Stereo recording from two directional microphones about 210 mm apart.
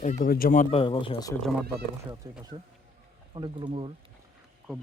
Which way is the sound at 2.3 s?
20° right (ahead or behind).